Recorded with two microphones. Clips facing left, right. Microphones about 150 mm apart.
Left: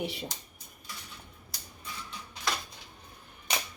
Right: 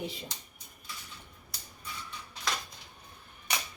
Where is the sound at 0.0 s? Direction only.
70° left (ahead or behind).